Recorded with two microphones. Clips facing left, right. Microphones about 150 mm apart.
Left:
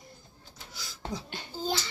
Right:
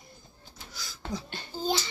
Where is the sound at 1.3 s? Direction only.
15° left (ahead or behind).